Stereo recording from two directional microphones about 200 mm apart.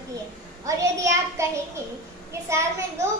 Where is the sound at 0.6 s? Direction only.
15° right (ahead or behind).